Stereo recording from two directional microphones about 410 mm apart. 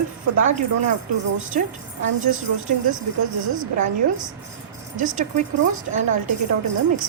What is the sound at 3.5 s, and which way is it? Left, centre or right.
Speech, centre.